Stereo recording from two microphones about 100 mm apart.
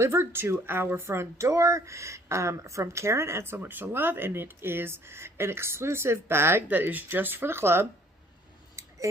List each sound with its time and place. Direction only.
0.0 s speech: 25° right (ahead or behind)
8.8 s scissors: 30° right (ahead or behind)